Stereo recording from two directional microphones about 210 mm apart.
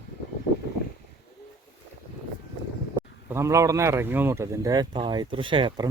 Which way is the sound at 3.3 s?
15° right (ahead or behind).